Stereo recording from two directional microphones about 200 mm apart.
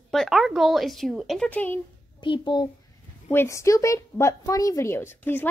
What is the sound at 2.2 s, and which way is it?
A child's voice, 25° left (ahead or behind).